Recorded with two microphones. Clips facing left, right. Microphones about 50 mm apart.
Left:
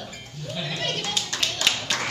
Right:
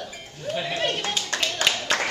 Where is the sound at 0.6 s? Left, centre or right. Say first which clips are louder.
Right 2 dB; right.